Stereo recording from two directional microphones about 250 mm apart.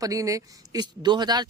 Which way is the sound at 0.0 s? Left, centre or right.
Centre.